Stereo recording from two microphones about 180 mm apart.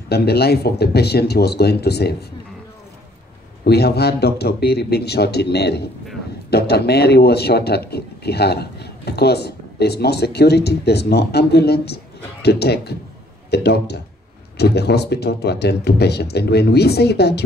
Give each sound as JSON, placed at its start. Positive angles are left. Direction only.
{"t": 0.1, "sound": "speech", "side_deg": 65}
{"t": 3.6, "sound": "speech", "side_deg": 65}